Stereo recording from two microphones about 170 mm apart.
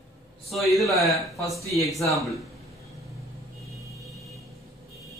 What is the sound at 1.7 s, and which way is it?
Speech, 20° left (ahead or behind).